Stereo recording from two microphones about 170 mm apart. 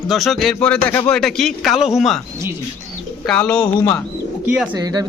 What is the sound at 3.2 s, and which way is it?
Speech, 5° left (ahead or behind).